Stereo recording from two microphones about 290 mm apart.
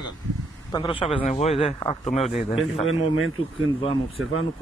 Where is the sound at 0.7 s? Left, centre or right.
Centre.